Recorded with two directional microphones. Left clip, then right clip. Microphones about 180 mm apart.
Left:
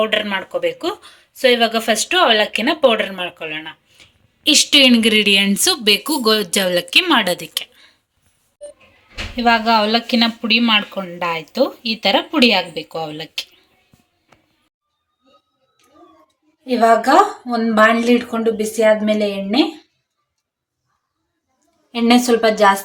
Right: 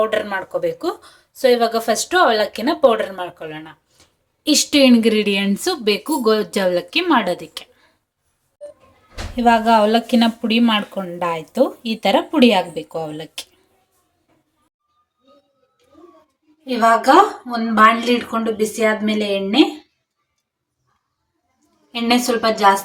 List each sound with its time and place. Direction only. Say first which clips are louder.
0.0 s speech: left 1 dB; 5° right (ahead or behind)
9.3 s speech: right 1 dB; 15° right (ahead or behind)
16.6 s a woman's voice: left 1 dB; 40° left (ahead or behind)
22.0 s a woman's voice: left 3 dB; 45° left (ahead or behind)